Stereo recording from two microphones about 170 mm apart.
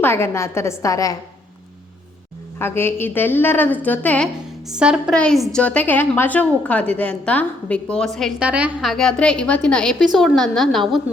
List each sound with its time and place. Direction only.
0.0 s a woman's voice: 15° left (ahead or behind)
2.6 s a woman's voice: 15° left (ahead or behind)
4.7 s a woman's voice: 5° right (ahead or behind)